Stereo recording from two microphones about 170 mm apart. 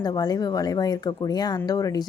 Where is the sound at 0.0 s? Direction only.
25° left (ahead or behind).